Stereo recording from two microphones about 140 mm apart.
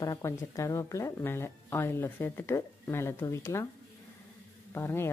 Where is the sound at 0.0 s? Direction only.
25° left (ahead or behind).